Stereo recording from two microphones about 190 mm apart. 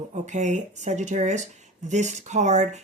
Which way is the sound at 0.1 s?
40° right (ahead or behind).